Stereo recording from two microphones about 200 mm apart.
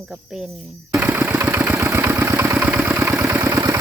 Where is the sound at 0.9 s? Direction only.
10° right (ahead or behind).